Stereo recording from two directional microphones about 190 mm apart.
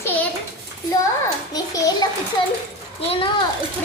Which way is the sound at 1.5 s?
20° left (ahead or behind).